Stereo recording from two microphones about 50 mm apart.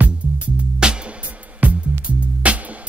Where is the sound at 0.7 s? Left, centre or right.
Centre.